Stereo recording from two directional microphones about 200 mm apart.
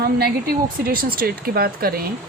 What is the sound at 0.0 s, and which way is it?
Speech, 50° right (ahead or behind).